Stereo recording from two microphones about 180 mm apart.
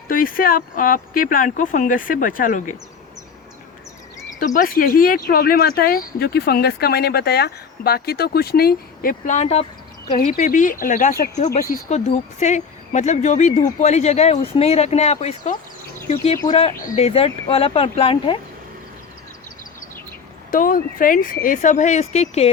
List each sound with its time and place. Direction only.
0.1 s speech: 50° left (ahead or behind)
4.4 s speech: 50° left (ahead or behind)
10.2 s speech: 50° left (ahead or behind); by 18.3 s 30° left (ahead or behind)
20.5 s speech: 50° left (ahead or behind)